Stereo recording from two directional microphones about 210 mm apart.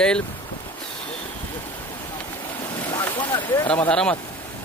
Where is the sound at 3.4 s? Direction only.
20° left (ahead or behind).